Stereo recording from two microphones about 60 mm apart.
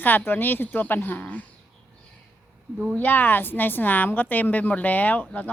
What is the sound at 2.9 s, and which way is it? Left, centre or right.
A woman's voice, left.